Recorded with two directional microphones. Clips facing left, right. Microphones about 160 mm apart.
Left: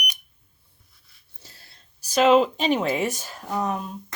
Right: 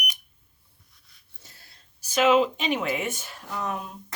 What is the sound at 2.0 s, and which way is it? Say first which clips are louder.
Speech: left 3 dB; 35° left (ahead or behind).